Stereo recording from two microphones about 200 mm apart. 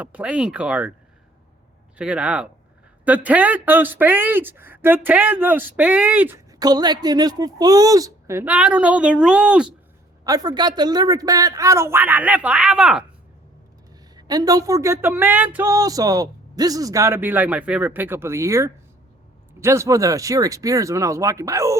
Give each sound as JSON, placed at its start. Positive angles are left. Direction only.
{"t": 0.0, "sound": "speech", "side_deg": -5}
{"t": 2.0, "sound": "speech", "side_deg": -5}
{"t": 10.2, "sound": "speech", "side_deg": -20}
{"t": 14.2, "sound": "speech", "side_deg": -20}